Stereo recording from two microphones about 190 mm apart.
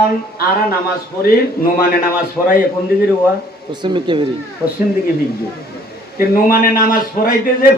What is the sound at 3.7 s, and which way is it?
Speech, 25° right (ahead or behind).